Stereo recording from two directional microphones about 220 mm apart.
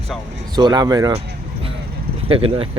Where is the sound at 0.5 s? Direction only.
20° right (ahead or behind).